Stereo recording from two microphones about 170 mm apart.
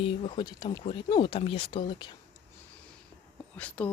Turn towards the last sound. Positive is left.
turn(degrees=10)  # may be behind; listen again after turning